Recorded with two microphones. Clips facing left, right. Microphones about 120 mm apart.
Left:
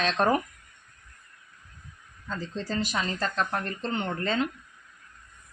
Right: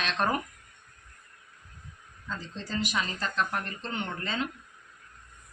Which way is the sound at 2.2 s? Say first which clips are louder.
Left 5 dB; 35° left (ahead or behind).